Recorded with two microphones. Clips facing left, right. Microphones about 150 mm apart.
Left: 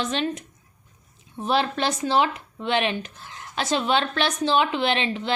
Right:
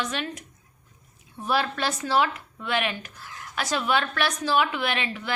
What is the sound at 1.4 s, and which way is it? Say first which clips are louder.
Speech: left 3 dB; 25° left (ahead or behind).